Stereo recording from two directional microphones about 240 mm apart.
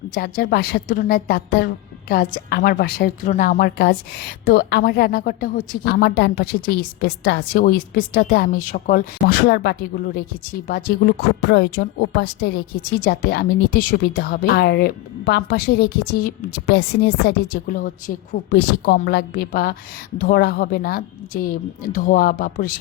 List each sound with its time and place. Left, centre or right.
0.1 s a woman's voice: left